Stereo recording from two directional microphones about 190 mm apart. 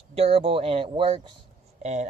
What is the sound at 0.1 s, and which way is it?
Speech, 30° right (ahead or behind).